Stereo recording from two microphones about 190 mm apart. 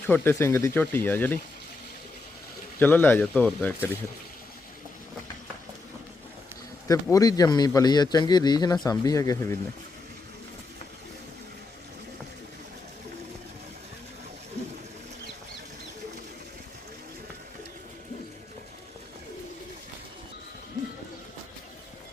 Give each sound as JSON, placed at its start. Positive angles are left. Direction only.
{"t": 0.0, "sound": "speech", "side_deg": 10}
{"t": 2.7, "sound": "speech", "side_deg": 10}
{"t": 6.8, "sound": "a man's voice", "side_deg": 15}